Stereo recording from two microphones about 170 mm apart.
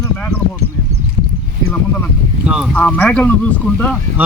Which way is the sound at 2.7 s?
10° left (ahead or behind).